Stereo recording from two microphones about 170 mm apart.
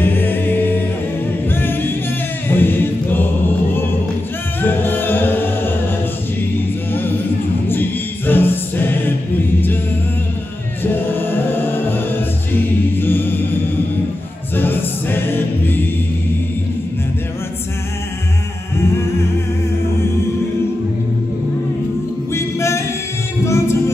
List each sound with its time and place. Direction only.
0.0 s a capella: 10° left (ahead or behind)
2.4 s choir: 10° left (ahead or behind)
4.6 s music: 10° left (ahead or behind)
6.9 s music: 10° left (ahead or behind)
7.6 s choir: 10° left (ahead or behind)
10.8 s music: 10° left (ahead or behind)
22.3 s music: 15° left (ahead or behind)